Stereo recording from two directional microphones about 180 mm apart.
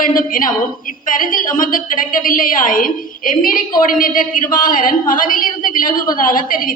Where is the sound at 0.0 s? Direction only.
50° left (ahead or behind).